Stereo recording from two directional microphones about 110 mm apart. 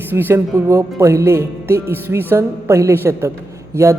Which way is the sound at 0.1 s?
20° right (ahead or behind).